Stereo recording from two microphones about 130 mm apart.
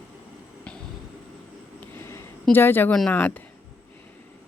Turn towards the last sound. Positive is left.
turn(degrees=15)  # may be behind; listen again after turning